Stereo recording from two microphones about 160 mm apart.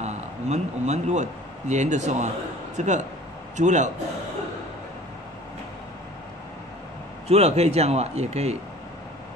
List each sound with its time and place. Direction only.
0.0 s speech: 45° right (ahead or behind)
7.2 s speech: 40° right (ahead or behind)